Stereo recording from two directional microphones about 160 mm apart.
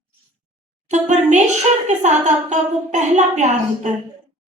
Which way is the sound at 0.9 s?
45° right (ahead or behind).